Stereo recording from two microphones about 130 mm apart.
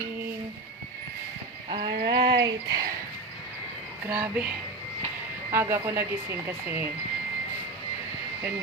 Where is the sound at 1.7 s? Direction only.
35° right (ahead or behind).